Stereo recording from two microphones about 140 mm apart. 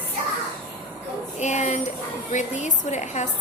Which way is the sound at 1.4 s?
55° left (ahead or behind).